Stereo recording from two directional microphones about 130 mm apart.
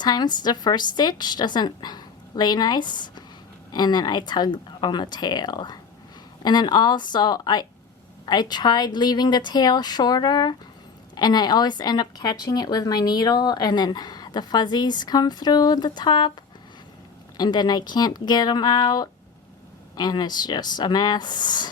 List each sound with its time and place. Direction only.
0.0 s speech: 30° left (ahead or behind)
17.3 s speech: 35° left (ahead or behind)